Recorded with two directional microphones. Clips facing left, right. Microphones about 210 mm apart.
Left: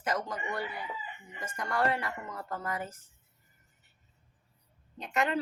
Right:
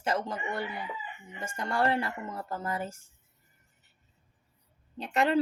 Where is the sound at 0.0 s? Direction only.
25° right (ahead or behind).